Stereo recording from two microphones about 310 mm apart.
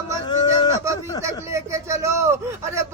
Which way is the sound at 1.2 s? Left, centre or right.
Centre.